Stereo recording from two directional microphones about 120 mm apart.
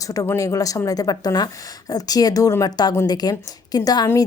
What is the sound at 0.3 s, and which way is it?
A woman's voice, 25° left (ahead or behind).